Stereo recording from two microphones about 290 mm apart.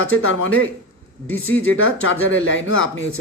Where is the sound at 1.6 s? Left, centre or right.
Left.